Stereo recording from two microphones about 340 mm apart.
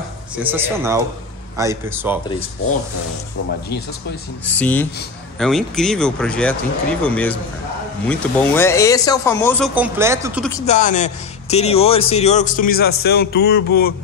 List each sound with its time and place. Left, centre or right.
0.4 s speech: centre
4.5 s speech: centre
9.8 s speech: centre
10.6 s speech: left